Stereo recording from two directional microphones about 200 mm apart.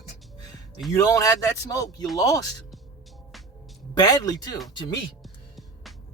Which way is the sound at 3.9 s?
20° left (ahead or behind).